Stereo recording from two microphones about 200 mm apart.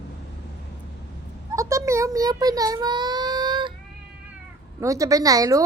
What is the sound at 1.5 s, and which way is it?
A child's voice, 15° right (ahead or behind).